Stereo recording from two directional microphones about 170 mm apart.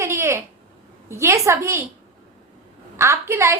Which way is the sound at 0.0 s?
15° right (ahead or behind).